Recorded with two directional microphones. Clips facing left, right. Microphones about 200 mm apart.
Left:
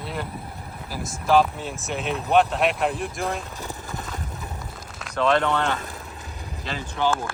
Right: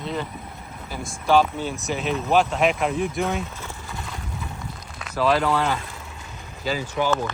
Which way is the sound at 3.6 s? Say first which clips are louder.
Left 2 dB; 45° left (ahead or behind).